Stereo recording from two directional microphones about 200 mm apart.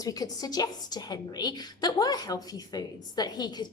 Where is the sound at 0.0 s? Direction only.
20° left (ahead or behind).